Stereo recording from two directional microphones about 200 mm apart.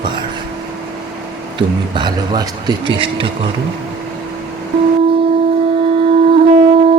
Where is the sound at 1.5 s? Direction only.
20° right (ahead or behind).